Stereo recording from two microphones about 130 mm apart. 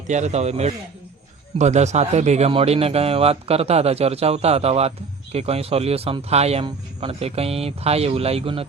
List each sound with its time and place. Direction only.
0.1 s speech: 60° right (ahead or behind)
2.5 s a man's voice: 50° right (ahead or behind)